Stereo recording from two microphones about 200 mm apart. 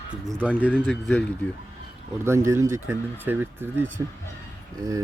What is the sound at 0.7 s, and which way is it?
Speech, 5° left (ahead or behind).